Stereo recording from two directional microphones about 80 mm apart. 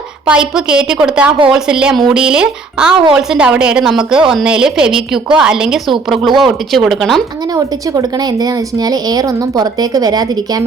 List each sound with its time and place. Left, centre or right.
0.3 s a woman's voice: centre
7.5 s speech: right